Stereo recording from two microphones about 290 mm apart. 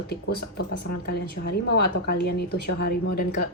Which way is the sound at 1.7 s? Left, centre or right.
Left.